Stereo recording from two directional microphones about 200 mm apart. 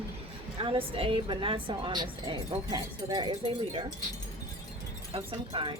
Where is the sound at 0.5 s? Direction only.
25° right (ahead or behind).